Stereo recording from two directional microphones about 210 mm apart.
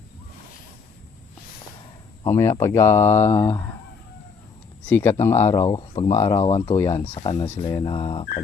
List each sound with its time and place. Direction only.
2.2 s speech: 15° left (ahead or behind)
4.9 s speech: 10° left (ahead or behind)
5.7 s speech: 25° left (ahead or behind)
6.4 s speech: 25° left (ahead or behind)
6.7 s speech: 15° left (ahead or behind)
7.0 s speech: 30° left (ahead or behind)